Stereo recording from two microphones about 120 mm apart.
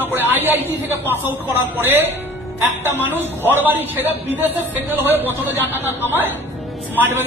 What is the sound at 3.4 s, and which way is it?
A man's voice, 15° right (ahead or behind).